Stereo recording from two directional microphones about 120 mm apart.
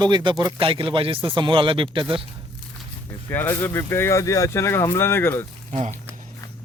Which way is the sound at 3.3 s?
15° left (ahead or behind).